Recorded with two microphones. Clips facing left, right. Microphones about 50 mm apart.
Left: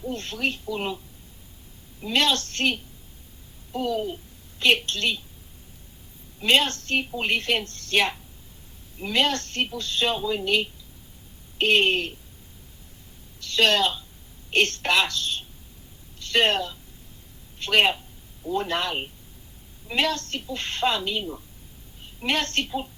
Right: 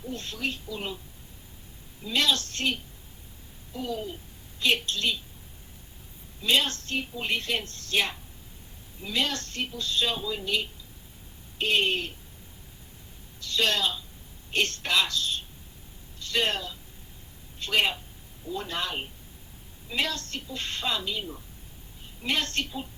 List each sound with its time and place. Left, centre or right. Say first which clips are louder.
0.1 s a woman's voice: left 4 dB; left
2.0 s a woman's voice: left 3 dB; left
6.4 s speech: left 4 dB; left
13.4 s a woman's voice: left 5 dB; left